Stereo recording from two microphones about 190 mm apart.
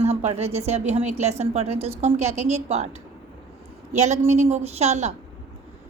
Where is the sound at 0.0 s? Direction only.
35° right (ahead or behind).